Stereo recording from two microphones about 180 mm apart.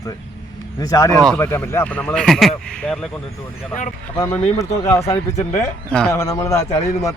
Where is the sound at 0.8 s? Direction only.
20° left (ahead or behind).